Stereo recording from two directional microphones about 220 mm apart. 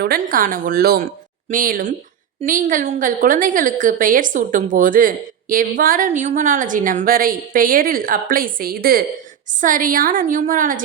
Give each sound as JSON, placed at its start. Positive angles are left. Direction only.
{"t": 0.0, "sound": "a woman's voice", "side_deg": -40}